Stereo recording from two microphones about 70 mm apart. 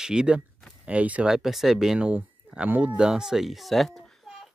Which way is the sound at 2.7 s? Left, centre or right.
Right.